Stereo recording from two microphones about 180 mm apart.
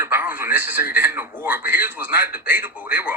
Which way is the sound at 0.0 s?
10° right (ahead or behind).